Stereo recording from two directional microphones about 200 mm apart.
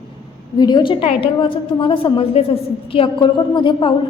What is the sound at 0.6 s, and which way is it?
A woman's voice, 25° left (ahead or behind).